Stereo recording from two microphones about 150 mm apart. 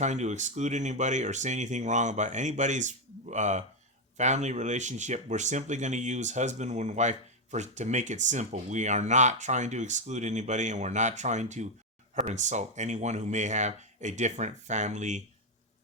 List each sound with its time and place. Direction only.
0.0 s speech: 50° right (ahead or behind)